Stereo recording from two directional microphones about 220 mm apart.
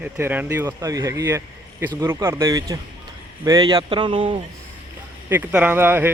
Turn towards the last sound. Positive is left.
turn(degrees=-10)  # may be behind; listen again after turning